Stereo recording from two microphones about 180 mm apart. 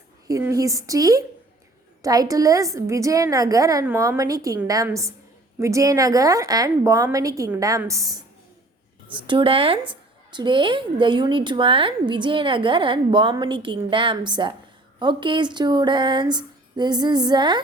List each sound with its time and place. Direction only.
0.3 s a woman's voice: 20° right (ahead or behind)
9.2 s a woman's voice: 30° right (ahead or behind)